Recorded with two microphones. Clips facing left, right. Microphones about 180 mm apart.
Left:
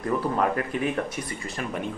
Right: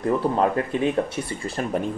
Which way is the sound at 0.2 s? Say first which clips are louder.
Right 4 dB; 25° right (ahead or behind).